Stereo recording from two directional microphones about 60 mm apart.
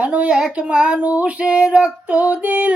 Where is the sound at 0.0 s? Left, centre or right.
Centre.